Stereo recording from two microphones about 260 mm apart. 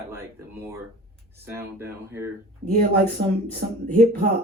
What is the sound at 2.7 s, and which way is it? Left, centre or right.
Speech, right.